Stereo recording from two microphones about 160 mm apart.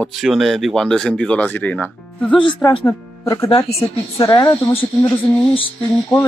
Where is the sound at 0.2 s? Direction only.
Centre (ahead or behind); by 4.8 s 30° left (ahead or behind).